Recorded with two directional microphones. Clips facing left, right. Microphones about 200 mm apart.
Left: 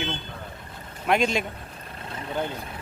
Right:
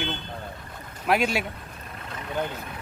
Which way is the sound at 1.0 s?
5° right (ahead or behind).